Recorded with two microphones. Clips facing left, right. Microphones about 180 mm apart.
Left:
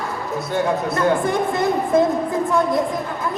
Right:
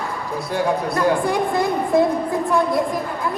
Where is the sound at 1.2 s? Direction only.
20° left (ahead or behind).